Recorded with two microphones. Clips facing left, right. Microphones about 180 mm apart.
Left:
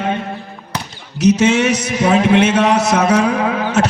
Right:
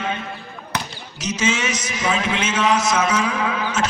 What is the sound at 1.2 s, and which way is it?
A man's voice, 65° left (ahead or behind).